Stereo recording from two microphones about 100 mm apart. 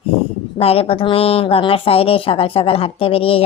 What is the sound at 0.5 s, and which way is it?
A woman's voice, 75° left (ahead or behind).